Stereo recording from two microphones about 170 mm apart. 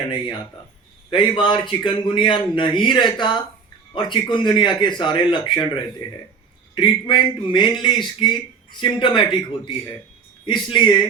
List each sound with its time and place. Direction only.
1.1 s a man's voice: 30° left (ahead or behind)
6.7 s a man's voice: 25° left (ahead or behind)
10.4 s a man's voice: 25° left (ahead or behind)